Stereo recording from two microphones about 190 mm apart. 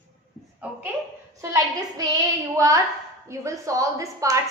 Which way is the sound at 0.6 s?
5° right (ahead or behind).